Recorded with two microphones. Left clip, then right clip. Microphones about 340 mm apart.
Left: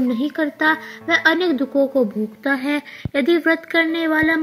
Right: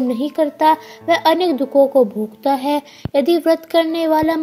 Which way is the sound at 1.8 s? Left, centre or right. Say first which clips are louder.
Right 7 dB; right.